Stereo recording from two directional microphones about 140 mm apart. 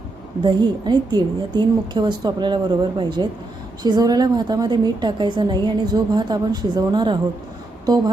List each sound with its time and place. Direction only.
0.4 s a woman's voice: 30° right (ahead or behind)
7.9 s music: 30° right (ahead or behind)